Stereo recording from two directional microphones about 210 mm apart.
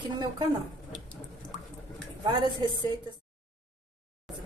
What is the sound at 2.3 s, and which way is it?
Speech, 20° right (ahead or behind).